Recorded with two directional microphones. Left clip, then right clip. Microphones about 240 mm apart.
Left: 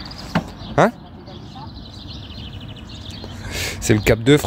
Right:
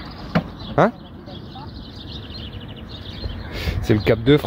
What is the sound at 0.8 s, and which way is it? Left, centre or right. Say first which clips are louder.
Speech: left 1 dB; centre.